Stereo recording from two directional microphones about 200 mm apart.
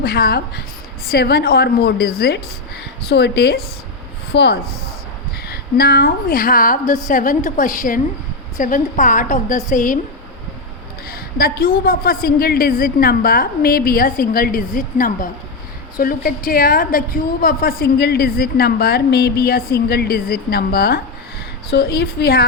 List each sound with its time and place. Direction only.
0.0 s a woman's voice: 50° left (ahead or behind)
11.1 s a woman's voice: 50° left (ahead or behind)